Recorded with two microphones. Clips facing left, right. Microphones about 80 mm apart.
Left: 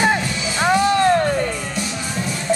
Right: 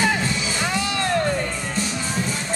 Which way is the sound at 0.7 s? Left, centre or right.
Left.